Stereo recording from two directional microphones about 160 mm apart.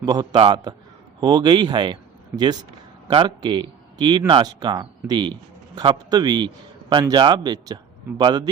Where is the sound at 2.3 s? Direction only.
10° right (ahead or behind).